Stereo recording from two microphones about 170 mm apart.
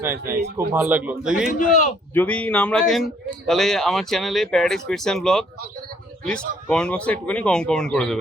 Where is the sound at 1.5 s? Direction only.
50° left (ahead or behind).